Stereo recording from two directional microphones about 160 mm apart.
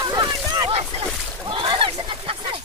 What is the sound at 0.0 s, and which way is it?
Boat, 25° right (ahead or behind).